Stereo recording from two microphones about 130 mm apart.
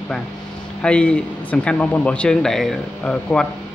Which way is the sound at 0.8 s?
10° left (ahead or behind).